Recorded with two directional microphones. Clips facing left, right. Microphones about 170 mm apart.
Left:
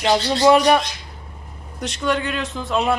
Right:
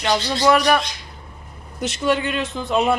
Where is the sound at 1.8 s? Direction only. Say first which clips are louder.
Right 2 dB; 5° right (ahead or behind).